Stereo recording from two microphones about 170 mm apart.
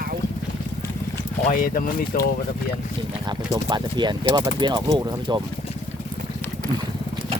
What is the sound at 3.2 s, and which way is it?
Speech, 25° right (ahead or behind).